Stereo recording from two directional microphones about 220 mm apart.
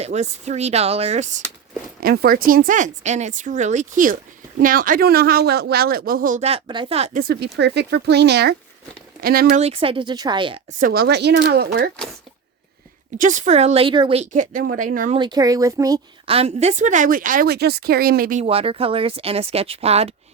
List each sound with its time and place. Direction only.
0.0 s a woman's voice: 30° right (ahead or behind)
2.0 s a woman's voice: 40° right (ahead or behind)
9.6 s a woman's voice: 25° right (ahead or behind)
10.8 s speech: 40° right (ahead or behind)
13.1 s a woman's voice: 35° right (ahead or behind)
15.1 s a woman's voice: 20° right (ahead or behind)